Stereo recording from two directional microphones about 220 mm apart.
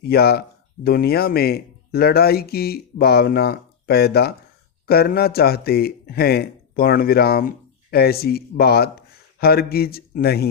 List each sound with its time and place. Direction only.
0.0 s a man's voice: 45° left (ahead or behind)